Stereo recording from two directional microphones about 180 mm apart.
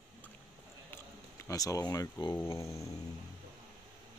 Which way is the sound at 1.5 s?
20° left (ahead or behind).